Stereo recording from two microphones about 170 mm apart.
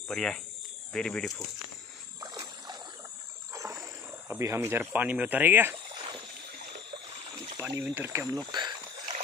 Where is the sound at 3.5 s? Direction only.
15° right (ahead or behind).